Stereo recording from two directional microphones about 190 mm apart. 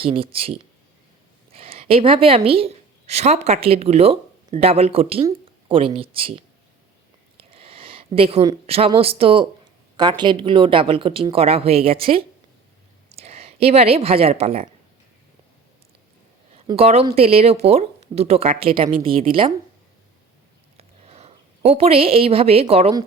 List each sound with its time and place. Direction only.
0.0 s speech: 30° right (ahead or behind)
1.5 s a woman's voice: 30° right (ahead or behind)
7.3 s a sound: 30° right (ahead or behind)
9.0 s speech: 30° right (ahead or behind)
16.6 s speech: 30° right (ahead or behind)
20.7 s a sound: 35° right (ahead or behind)